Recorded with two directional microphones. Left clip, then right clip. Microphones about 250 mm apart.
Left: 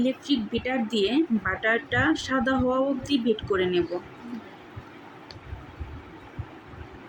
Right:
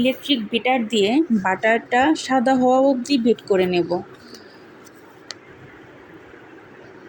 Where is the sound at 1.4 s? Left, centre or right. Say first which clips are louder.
Right 6 dB; right.